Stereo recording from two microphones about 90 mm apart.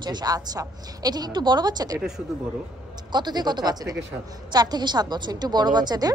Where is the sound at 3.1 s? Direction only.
55° right (ahead or behind).